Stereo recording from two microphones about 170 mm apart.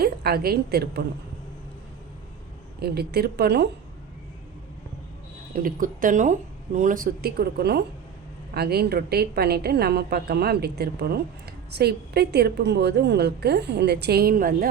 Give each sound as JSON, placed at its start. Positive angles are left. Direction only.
{"t": 0.0, "sound": "a woman's voice", "side_deg": -65}
{"t": 2.8, "sound": "a woman's voice", "side_deg": -70}
{"t": 5.5, "sound": "a woman's voice", "side_deg": -55}